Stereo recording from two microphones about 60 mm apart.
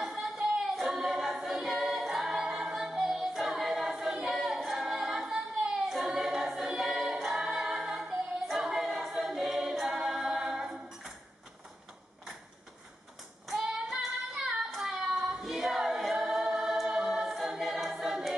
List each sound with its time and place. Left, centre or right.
0.0 s a capella: centre
2.7 s music: centre
8.5 s a capella: centre
13.5 s child singing: centre